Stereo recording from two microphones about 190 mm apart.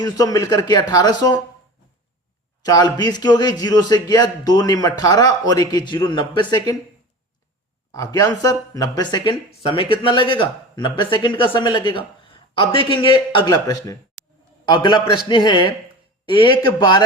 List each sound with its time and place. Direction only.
0.0 s speech: 20° left (ahead or behind)
2.6 s speech: 20° left (ahead or behind)
7.9 s speech: 20° left (ahead or behind)
14.2 s a sound: 5° left (ahead or behind)
14.6 s a man's voice: 20° left (ahead or behind)